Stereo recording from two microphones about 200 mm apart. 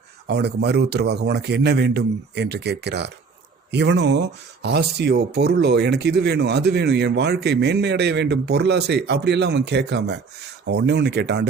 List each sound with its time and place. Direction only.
0.3 s speech: 55° right (ahead or behind)